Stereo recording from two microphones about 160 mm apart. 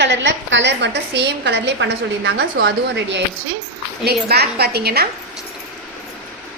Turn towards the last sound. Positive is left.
turn(degrees=-80)